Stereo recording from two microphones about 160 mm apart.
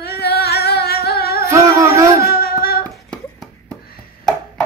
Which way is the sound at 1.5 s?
20° right (ahead or behind).